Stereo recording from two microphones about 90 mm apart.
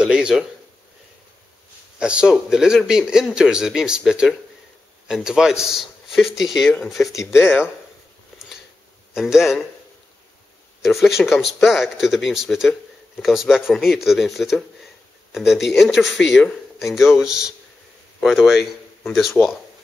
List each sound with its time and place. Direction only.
0.0 s a man's voice: 10° right (ahead or behind)
2.0 s a man's voice: 10° right (ahead or behind)
7.1 s speech: 35° left (ahead or behind)
9.1 s a man's voice: 5° right (ahead or behind)
10.8 s a man's voice: 5° right (ahead or behind)